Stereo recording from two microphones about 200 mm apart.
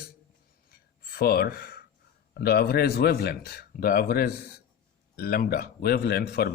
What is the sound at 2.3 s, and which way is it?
A man's voice, 50° left (ahead or behind).